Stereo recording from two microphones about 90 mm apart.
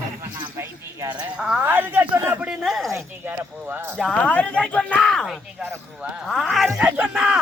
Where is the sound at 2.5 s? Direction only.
5° right (ahead or behind).